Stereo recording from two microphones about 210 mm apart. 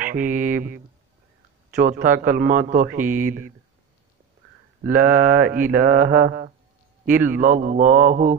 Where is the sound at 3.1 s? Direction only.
10° right (ahead or behind).